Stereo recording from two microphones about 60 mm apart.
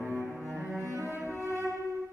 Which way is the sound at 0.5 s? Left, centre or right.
Right.